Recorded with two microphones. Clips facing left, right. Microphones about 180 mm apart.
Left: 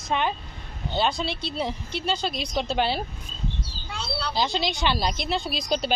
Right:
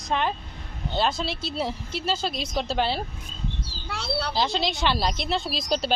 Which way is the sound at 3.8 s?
70° right (ahead or behind).